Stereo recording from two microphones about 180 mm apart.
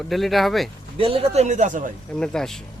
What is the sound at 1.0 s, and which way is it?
Speech, 30° right (ahead or behind).